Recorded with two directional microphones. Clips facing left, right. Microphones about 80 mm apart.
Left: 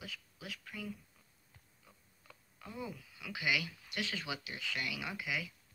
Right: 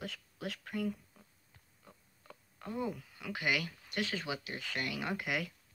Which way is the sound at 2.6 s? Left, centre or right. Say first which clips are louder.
Right 7 dB; right.